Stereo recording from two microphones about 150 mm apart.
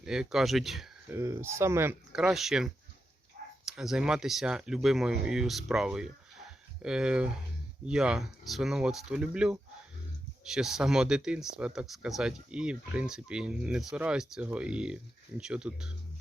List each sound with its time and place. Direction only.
0.0 s speech: 5° right (ahead or behind)
1.0 s speech: 20° right (ahead or behind)
2.1 s speech: 5° right (ahead or behind)
3.4 s a sound: 90° right
3.7 s speech: 5° right (ahead or behind)